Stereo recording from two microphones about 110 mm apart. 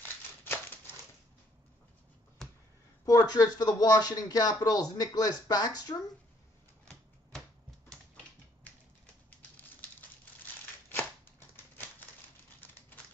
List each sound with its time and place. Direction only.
2.4 s a sound: 5° left (ahead or behind)
3.1 s speech: 35° left (ahead or behind)
10.9 s scissors: 20° left (ahead or behind)
12.5 s typewriter: 20° left (ahead or behind)